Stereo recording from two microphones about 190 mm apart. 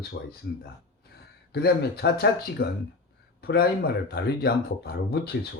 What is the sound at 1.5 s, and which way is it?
Speech, 60° left (ahead or behind).